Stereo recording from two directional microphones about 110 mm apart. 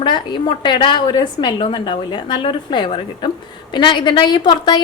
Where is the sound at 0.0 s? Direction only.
45° left (ahead or behind).